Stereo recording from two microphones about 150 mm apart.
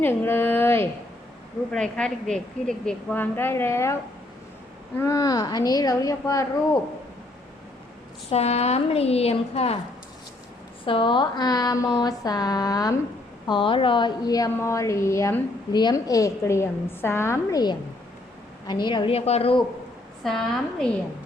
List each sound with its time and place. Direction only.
0.0 s speech: 15° left (ahead or behind)
1.7 s a woman's voice: 5° left (ahead or behind)
4.9 s a woman's voice: 20° left (ahead or behind)
8.3 s a woman's voice: 45° left (ahead or behind)
10.8 s a woman's voice: 35° left (ahead or behind)
20.2 s a woman's voice: centre (ahead or behind)